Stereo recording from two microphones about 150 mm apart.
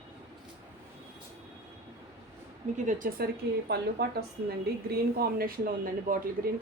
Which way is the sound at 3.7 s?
90° right.